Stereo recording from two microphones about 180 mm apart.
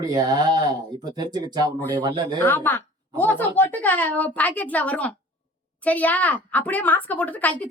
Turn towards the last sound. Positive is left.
turn(degrees=10)  # may be behind; listen again after turning